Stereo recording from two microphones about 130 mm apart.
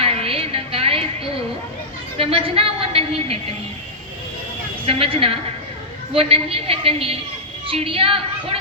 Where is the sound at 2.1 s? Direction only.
45° right (ahead or behind).